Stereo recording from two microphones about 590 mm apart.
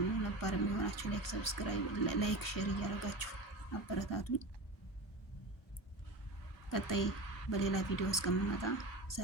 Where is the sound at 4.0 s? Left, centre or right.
Left.